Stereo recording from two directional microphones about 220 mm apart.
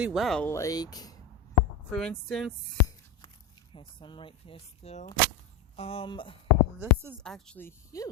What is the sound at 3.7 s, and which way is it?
Speech, 20° left (ahead or behind).